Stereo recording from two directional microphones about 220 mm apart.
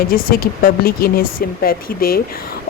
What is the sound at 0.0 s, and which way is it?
Speech, 40° left (ahead or behind).